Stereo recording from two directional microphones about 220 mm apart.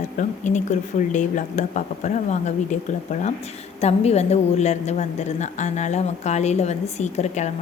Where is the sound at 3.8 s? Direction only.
30° left (ahead or behind).